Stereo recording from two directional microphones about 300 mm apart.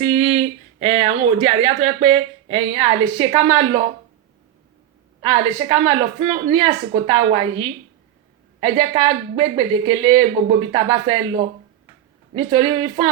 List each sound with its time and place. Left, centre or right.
0.0 s speech: centre
5.2 s speech: centre
12.3 s speech: centre